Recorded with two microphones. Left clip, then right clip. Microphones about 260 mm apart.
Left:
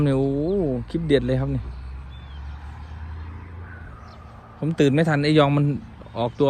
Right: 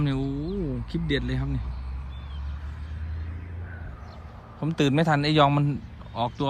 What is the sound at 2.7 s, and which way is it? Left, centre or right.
Vehicle, centre.